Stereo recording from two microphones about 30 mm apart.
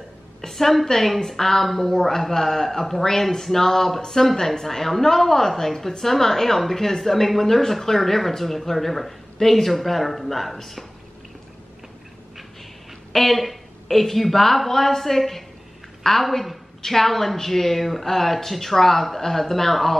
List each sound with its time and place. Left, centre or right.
0.5 s speech: centre
13.1 s speech: centre